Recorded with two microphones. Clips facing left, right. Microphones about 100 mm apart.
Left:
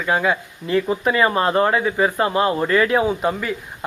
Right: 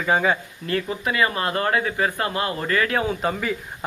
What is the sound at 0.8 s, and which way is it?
Speech, 30° left (ahead or behind).